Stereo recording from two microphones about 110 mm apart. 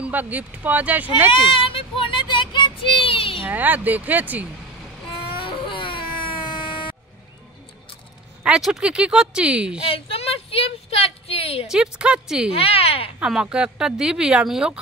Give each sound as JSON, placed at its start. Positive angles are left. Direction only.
{"t": 0.1, "sound": "speech", "side_deg": -15}
{"t": 1.5, "sound": "child singing", "side_deg": 55}
{"t": 3.4, "sound": "speech", "side_deg": -15}
{"t": 5.4, "sound": "baby cry", "side_deg": 50}
{"t": 8.5, "sound": "speech", "side_deg": -5}
{"t": 9.8, "sound": "a sound", "side_deg": 55}
{"t": 11.6, "sound": "speech", "side_deg": -5}
{"t": 12.5, "sound": "speech", "side_deg": 60}
{"t": 13.2, "sound": "speech", "side_deg": -10}